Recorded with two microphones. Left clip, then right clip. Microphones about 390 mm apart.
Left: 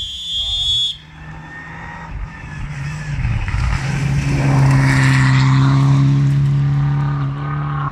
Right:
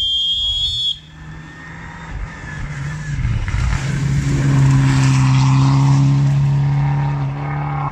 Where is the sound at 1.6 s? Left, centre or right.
Centre.